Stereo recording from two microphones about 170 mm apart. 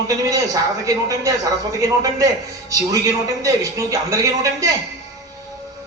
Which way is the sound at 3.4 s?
20° right (ahead or behind).